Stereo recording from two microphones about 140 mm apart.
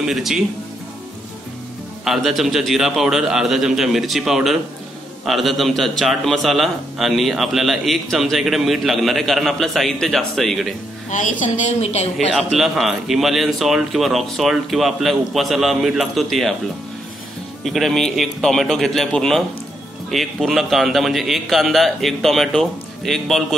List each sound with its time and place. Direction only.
0.0 s a man's voice: centre (ahead or behind)
2.0 s a man's voice: centre (ahead or behind)
11.1 s a woman's voice: 65° left (ahead or behind)
12.4 s a man's voice: centre (ahead or behind)
17.6 s a man's voice: centre (ahead or behind)